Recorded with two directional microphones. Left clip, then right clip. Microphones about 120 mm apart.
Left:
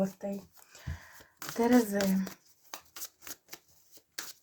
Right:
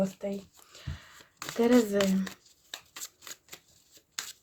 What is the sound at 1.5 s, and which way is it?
Speech, 40° right (ahead or behind).